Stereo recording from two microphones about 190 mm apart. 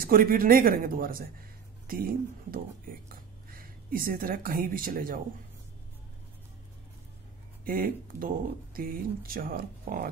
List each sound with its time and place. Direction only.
0.0 s speech: 50° right (ahead or behind)
7.6 s speech: 50° right (ahead or behind)